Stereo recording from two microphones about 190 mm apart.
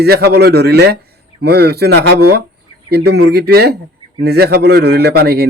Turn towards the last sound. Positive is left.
turn(degrees=-55)  # may be behind; listen again after turning